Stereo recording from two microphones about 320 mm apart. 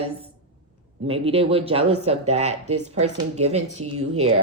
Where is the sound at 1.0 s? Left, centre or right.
Centre.